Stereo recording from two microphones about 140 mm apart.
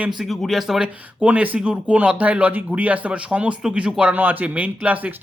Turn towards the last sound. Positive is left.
turn(degrees=-10)  # may be behind; listen again after turning